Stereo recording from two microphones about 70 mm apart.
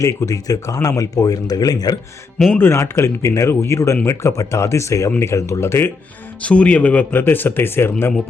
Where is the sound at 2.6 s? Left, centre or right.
Left.